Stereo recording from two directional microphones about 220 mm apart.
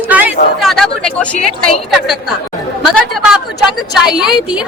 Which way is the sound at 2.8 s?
Centre (ahead or behind).